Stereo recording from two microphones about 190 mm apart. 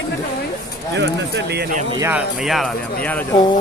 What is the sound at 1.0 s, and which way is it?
Speech, 60° right (ahead or behind).